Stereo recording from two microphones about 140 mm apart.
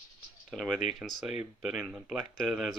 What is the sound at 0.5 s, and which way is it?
Speech, 5° left (ahead or behind).